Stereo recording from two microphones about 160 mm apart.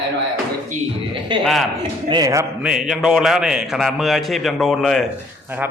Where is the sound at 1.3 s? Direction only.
30° right (ahead or behind).